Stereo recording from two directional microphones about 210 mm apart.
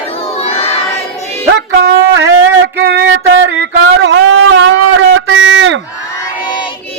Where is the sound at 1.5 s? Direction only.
50° right (ahead or behind).